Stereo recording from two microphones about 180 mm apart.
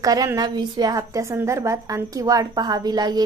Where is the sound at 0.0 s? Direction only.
20° right (ahead or behind).